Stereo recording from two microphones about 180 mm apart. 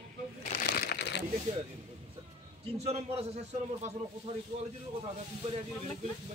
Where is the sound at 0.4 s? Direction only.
60° left (ahead or behind).